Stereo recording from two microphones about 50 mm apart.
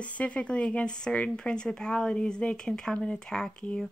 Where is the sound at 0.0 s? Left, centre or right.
Left.